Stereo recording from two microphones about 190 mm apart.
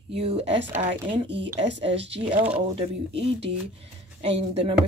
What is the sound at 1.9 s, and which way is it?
Speech, 70° right (ahead or behind).